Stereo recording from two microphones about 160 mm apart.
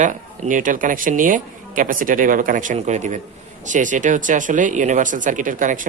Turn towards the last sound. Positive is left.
turn(degrees=-55)  # may be behind; listen again after turning